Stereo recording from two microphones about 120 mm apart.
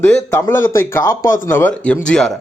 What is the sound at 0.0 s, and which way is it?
Speech, 20° left (ahead or behind).